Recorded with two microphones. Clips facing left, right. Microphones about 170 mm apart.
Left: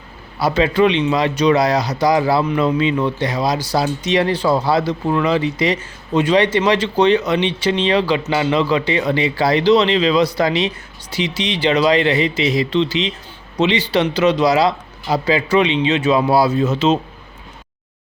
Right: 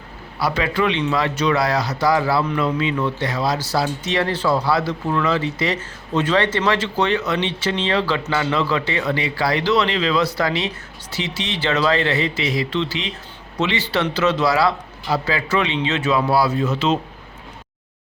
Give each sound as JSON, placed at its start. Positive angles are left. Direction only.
{"t": 0.3, "sound": "speech", "side_deg": 20}